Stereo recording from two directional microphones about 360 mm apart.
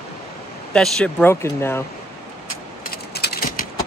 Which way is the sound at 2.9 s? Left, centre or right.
Left.